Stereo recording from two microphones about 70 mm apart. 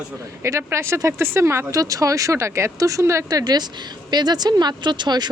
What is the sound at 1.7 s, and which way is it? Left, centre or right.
Speech, right.